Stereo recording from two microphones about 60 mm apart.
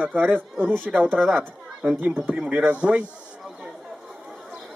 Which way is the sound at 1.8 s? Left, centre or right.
Right.